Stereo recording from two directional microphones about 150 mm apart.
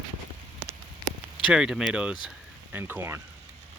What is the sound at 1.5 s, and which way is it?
Speech, 5° right (ahead or behind).